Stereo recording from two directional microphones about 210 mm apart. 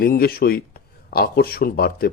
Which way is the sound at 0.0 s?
45° left (ahead or behind).